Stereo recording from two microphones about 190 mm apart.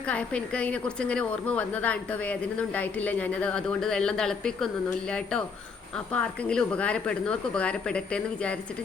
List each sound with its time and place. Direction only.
0.1 s a woman's voice: 5° left (ahead or behind)